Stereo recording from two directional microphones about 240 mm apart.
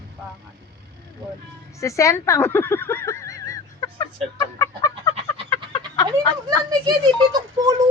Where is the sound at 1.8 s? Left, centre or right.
Centre.